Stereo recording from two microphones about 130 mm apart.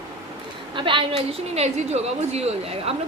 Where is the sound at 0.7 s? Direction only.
40° right (ahead or behind).